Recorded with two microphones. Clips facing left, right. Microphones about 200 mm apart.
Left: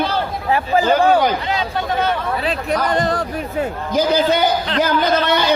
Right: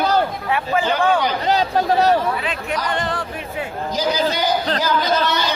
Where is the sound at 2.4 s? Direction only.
35° left (ahead or behind).